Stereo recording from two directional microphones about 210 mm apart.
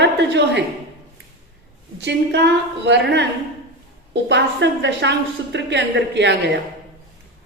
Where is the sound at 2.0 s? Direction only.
55° right (ahead or behind).